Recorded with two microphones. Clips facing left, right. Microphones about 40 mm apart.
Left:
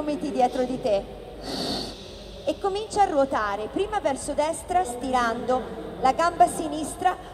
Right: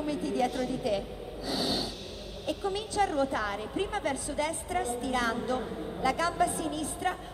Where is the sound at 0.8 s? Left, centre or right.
Centre.